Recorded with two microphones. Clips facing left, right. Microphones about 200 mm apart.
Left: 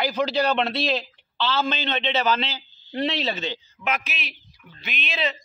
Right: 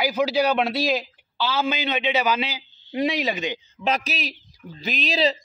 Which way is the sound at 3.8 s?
35° right (ahead or behind).